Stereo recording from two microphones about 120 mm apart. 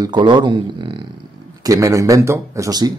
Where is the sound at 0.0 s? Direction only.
40° right (ahead or behind).